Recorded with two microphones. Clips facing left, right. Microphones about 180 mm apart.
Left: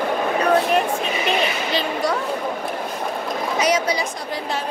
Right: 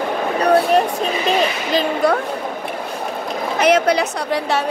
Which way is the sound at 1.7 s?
55° right (ahead or behind).